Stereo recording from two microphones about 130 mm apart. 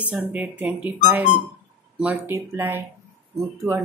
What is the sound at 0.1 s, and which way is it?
A woman's voice, 15° right (ahead or behind).